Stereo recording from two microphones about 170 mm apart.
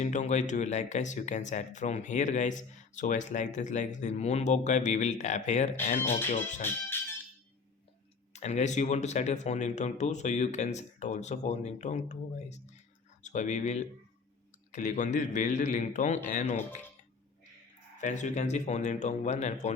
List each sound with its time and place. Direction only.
0.0 s speech: 45° left (ahead or behind)
6.4 s speech: 15° left (ahead or behind)
8.3 s speech: 40° left (ahead or behind)
17.9 s speech: 45° left (ahead or behind)